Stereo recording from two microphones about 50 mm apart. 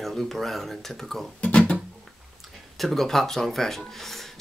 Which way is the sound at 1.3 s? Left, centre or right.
Left.